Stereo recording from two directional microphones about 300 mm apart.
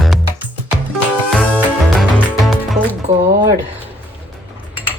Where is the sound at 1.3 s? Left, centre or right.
Centre.